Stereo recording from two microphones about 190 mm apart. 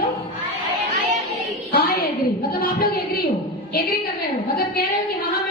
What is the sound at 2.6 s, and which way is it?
Speech, 50° left (ahead or behind).